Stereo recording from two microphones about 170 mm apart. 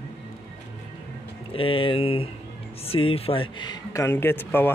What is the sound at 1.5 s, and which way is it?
Speech, 30° left (ahead or behind).